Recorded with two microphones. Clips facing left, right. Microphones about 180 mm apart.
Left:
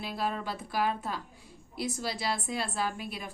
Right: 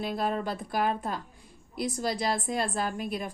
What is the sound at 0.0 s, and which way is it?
A woman's voice, 50° right (ahead or behind).